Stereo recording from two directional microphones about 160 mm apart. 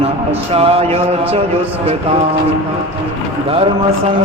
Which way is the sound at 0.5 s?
40° right (ahead or behind).